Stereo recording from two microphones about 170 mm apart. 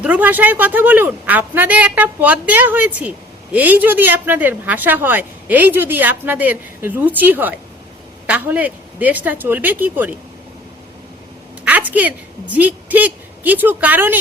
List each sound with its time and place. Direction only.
0.0 s a woman's voice: 10° right (ahead or behind)
11.6 s a woman's voice: 10° right (ahead or behind)